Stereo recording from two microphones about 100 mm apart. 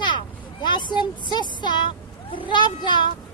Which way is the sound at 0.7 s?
50° left (ahead or behind).